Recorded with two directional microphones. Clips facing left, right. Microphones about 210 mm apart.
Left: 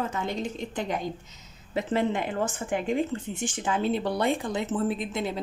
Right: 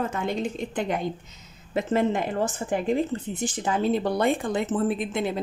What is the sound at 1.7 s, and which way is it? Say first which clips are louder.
Speech: right 3 dB; 45° right (ahead or behind).